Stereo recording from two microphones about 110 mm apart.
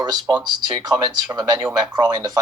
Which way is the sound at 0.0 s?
40° right (ahead or behind).